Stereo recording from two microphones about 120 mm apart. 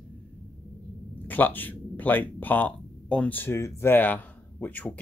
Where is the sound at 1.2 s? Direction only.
15° left (ahead or behind).